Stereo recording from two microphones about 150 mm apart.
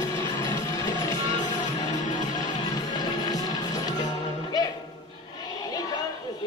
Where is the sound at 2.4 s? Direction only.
25° left (ahead or behind).